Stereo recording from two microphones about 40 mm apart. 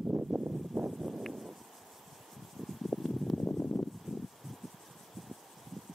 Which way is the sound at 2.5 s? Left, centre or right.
Centre.